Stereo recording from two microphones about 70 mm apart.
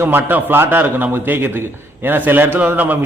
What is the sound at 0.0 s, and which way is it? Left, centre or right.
A man's voice, right.